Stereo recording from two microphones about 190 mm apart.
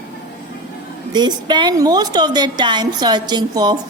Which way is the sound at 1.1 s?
20° right (ahead or behind).